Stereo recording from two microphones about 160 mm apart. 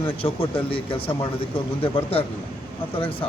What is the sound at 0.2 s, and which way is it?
Speech, 35° left (ahead or behind).